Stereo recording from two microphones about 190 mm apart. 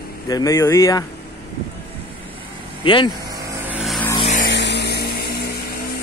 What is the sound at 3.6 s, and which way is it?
Vehicle, 5° right (ahead or behind).